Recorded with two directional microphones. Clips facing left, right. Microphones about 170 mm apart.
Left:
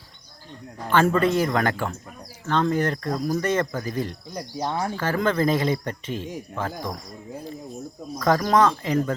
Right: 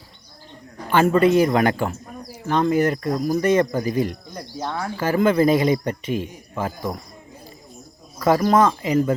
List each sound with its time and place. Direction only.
1.1 s speech: 15° right (ahead or behind)
4.4 s speech: 15° left (ahead or behind)
4.9 s speech: 10° right (ahead or behind)
8.2 s speech: 5° right (ahead or behind)